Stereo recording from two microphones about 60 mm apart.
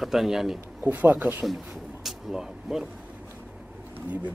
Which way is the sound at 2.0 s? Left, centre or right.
Centre.